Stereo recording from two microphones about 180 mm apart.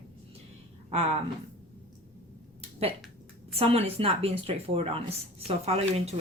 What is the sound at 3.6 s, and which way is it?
Speech, 35° right (ahead or behind).